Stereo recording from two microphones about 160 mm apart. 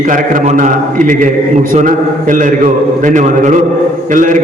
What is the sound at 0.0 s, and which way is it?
A man's voice, 55° right (ahead or behind).